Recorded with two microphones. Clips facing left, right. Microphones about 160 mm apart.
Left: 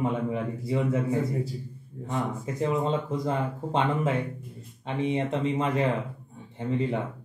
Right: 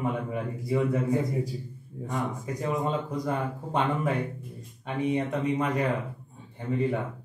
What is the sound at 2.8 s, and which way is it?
Speech, 20° left (ahead or behind).